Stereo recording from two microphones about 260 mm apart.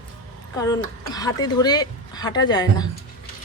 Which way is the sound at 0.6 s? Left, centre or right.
Centre.